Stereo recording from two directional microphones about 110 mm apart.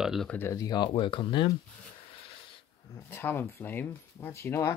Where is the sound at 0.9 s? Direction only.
50° left (ahead or behind).